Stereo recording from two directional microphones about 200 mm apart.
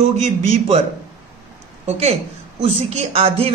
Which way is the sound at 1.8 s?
35° right (ahead or behind).